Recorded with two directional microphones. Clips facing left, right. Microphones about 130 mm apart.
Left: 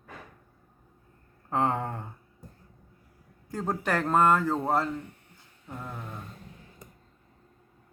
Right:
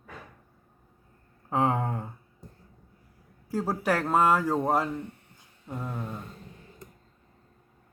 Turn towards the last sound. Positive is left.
turn(degrees=-10)  # may be behind; listen again after turning